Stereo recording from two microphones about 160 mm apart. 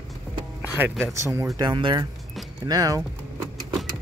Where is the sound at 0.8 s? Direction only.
10° right (ahead or behind).